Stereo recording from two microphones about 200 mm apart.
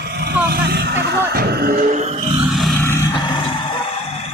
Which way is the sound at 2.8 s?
15° left (ahead or behind).